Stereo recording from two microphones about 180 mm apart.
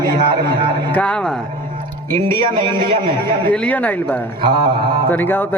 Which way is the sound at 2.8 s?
25° right (ahead or behind).